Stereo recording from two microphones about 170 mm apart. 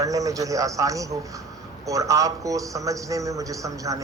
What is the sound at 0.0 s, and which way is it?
Speech, 20° right (ahead or behind).